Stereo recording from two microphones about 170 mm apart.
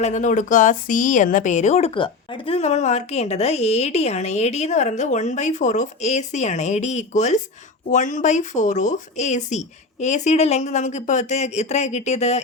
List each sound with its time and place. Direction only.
0.0 s speech: 45° left (ahead or behind)